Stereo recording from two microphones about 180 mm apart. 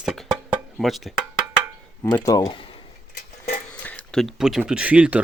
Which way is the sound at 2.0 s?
20° left (ahead or behind).